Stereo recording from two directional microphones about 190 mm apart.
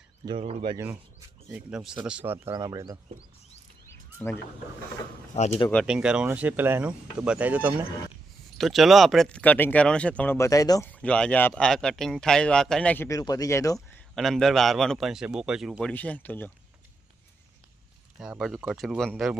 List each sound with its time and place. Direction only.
0.3 s speech: 30° right (ahead or behind)
1.5 s a man's voice: 5° right (ahead or behind)
3.8 s a sound: 10° left (ahead or behind)
5.3 s speech: 35° left (ahead or behind)
5.8 s speech: 5° right (ahead or behind); by 10.8 s 20° left (ahead or behind)
10.9 s a man's voice: 5° left (ahead or behind)
14.2 s a man's voice: centre (ahead or behind)
18.2 s a man's voice: centre (ahead or behind)